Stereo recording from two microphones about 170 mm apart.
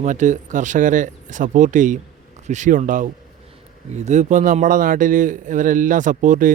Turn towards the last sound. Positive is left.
turn(degrees=-50)  # may be behind; listen again after turning